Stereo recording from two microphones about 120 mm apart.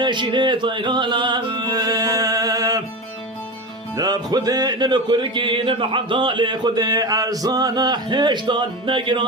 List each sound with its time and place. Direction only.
0.0 s music: 40° right (ahead or behind)
3.9 s music: 35° right (ahead or behind)